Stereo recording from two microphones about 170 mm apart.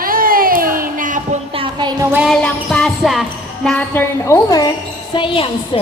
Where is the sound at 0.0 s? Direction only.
55° right (ahead or behind).